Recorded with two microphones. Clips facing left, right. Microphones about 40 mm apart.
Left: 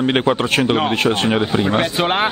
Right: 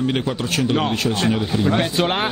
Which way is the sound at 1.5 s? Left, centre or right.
Left.